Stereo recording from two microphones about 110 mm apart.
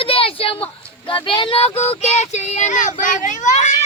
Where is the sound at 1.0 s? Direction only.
50° left (ahead or behind); by 2.9 s 90° left.